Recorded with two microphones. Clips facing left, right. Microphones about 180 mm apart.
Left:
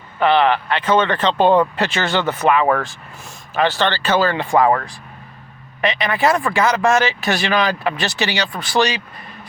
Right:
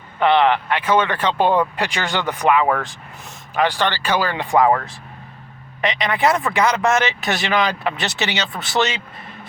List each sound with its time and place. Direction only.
0.2 s speech: 20° right (ahead or behind)
5.8 s speech: 20° right (ahead or behind)